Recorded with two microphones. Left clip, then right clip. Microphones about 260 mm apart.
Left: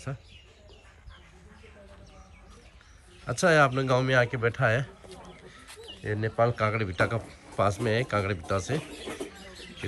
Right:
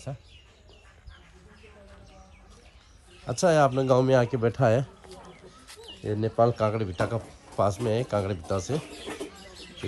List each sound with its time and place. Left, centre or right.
3.3 s a man's voice: centre
5.1 s a sound: centre
6.0 s a man's voice: right
9.5 s bird: centre